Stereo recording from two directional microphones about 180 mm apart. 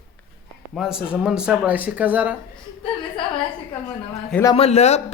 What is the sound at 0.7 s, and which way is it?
Speech, 5° right (ahead or behind).